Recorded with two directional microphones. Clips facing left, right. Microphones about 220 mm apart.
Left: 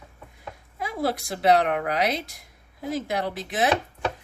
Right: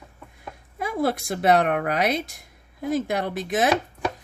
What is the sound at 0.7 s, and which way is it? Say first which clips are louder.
A woman's voice: right 3 dB; 50° right (ahead or behind).